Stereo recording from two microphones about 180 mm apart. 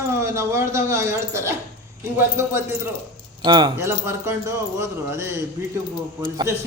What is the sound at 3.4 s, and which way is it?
Speech, 25° right (ahead or behind).